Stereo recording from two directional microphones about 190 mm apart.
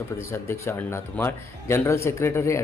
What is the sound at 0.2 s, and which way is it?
A man's voice, 15° left (ahead or behind).